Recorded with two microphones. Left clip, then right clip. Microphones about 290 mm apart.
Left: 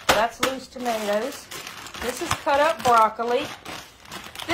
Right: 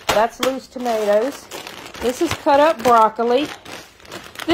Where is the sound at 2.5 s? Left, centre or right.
Right.